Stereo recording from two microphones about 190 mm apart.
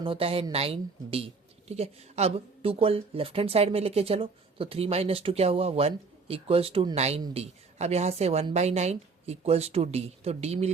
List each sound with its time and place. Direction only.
0.0 s speech: 30° right (ahead or behind)